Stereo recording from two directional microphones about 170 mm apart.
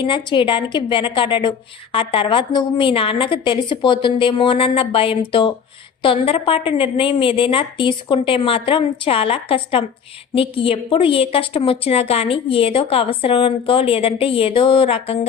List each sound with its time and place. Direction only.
0.0 s a woman's voice: 30° left (ahead or behind)